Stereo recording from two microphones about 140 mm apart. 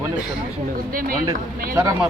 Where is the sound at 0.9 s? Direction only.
90° right.